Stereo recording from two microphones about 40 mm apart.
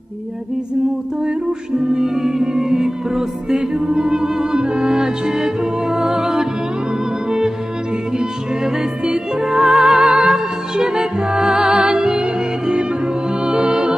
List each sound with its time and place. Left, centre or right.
1.9 s music: centre
10.0 s music: right